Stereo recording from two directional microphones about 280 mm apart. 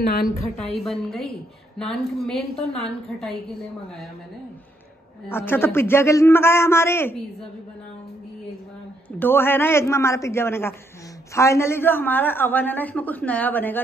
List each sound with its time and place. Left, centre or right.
0.2 s a woman's voice: centre
2.6 s a woman's voice: left
3.1 s a woman's voice: centre
5.3 s a man's voice: centre
9.2 s a man's voice: centre